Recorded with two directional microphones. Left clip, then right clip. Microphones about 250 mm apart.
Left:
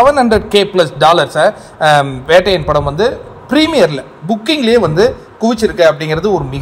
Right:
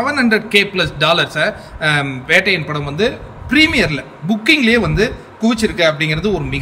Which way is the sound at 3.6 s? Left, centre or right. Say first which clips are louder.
Left 3 dB; centre.